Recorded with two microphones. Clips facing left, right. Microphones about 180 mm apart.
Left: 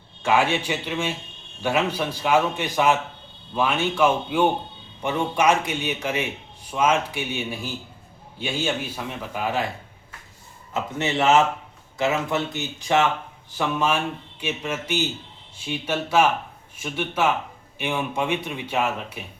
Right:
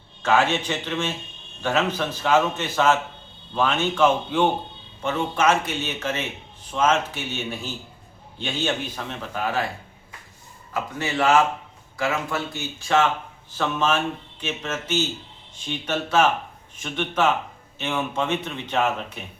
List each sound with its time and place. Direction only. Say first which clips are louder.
0.2 s speech: even; 10° left (ahead or behind)
10.8 s speech: left 1 dB; 25° left (ahead or behind)